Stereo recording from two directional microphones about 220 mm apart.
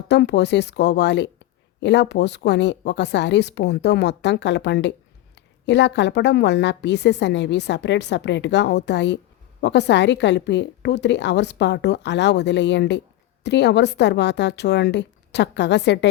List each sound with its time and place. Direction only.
0.1 s a woman's voice: 50° left (ahead or behind)